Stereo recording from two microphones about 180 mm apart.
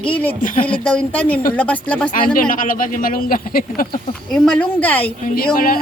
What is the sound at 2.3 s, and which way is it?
Speech, 50° left (ahead or behind).